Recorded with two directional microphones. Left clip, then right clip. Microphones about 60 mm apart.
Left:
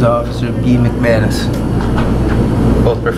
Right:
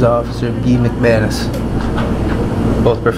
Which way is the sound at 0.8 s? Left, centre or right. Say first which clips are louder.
Right 1 dB; right.